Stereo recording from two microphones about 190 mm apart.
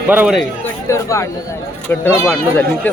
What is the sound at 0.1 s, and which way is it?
Speech, 5° right (ahead or behind).